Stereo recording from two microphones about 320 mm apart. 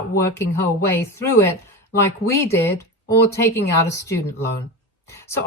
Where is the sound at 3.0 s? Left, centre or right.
Left.